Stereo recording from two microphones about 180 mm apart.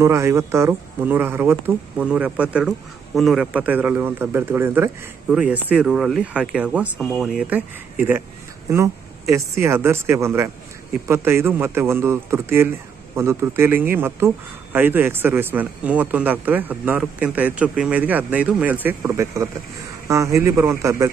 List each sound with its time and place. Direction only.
0.0 s speech: 15° right (ahead or behind)
8.6 s speech: 15° right (ahead or behind)